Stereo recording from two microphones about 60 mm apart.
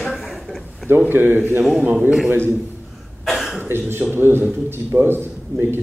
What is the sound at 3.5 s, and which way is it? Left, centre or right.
A man's voice, right.